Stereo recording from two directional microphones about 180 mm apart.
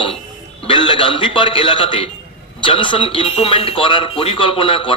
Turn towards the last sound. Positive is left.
turn(degrees=30)  # may be behind; listen again after turning